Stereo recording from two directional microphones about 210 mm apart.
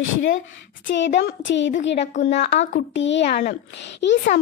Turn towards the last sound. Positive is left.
turn(degrees=55)  # may be behind; listen again after turning